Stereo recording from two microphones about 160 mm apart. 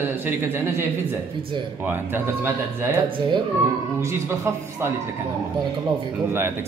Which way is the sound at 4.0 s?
15° right (ahead or behind).